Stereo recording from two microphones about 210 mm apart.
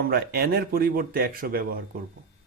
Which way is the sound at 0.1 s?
45° right (ahead or behind).